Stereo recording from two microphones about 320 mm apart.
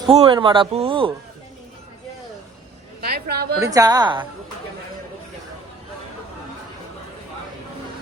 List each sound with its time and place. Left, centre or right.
0.0 s speech: centre
3.0 s a woman's voice: right
3.6 s speech: centre